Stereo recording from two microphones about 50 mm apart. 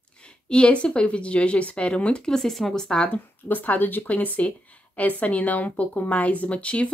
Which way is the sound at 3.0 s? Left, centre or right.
Left.